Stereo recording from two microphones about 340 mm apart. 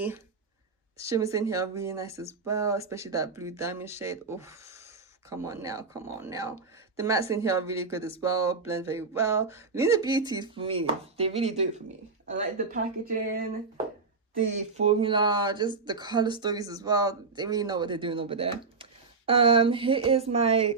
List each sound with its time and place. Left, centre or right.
0.9 s speech: centre